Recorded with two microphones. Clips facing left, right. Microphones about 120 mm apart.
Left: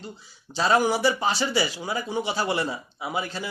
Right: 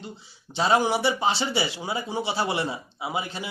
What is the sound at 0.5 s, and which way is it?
Speech, 20° right (ahead or behind).